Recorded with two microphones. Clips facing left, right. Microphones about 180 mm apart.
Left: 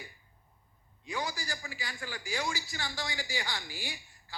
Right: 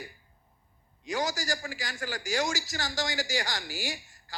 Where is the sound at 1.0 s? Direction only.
90° right.